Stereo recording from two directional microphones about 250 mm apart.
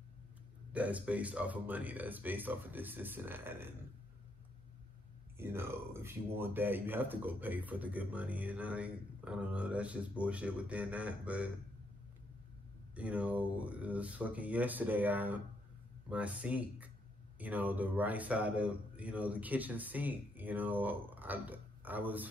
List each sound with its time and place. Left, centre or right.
0.7 s speech: centre
5.4 s speech: centre
12.9 s speech: centre